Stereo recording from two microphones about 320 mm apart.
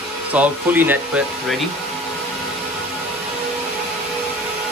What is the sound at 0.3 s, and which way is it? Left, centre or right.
Speech, centre.